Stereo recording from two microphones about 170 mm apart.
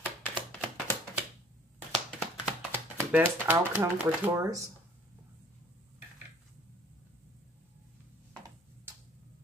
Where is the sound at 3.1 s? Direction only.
10° right (ahead or behind).